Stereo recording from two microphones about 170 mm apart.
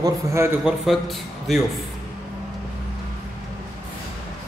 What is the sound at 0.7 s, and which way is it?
Speech, centre (ahead or behind).